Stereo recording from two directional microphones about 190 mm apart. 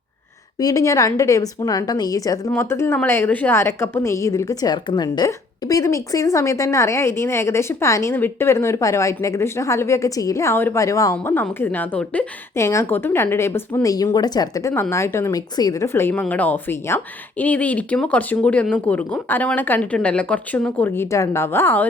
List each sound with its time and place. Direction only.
0.6 s a woman's voice: 15° left (ahead or behind)